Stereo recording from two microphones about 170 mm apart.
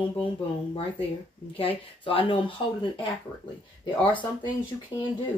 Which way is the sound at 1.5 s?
35° left (ahead or behind).